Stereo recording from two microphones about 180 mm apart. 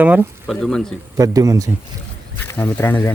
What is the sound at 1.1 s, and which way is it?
Speech, 20° right (ahead or behind).